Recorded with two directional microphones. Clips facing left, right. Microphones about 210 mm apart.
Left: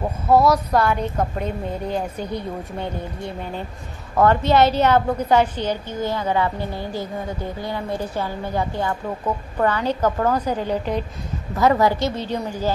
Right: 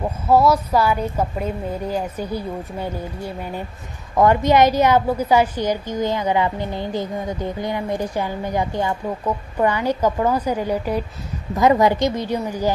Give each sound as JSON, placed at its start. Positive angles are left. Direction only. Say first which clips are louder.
{"t": 0.3, "sound": "a woman's voice", "louder": "even", "side_deg": 0}